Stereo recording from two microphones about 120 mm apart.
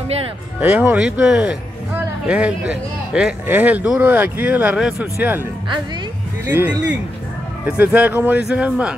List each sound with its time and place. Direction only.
0.6 s speech: 15° right (ahead or behind)
6.5 s speech: 20° right (ahead or behind)